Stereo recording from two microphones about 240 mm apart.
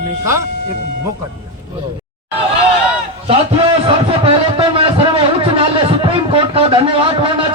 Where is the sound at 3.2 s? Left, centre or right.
Right.